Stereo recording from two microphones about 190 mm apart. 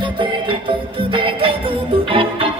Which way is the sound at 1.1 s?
25° right (ahead or behind).